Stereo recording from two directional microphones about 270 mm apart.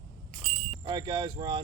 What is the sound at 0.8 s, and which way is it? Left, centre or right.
Speech, centre.